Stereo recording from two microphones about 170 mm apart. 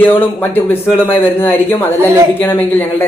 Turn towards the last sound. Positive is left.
turn(degrees=10)  # may be behind; listen again after turning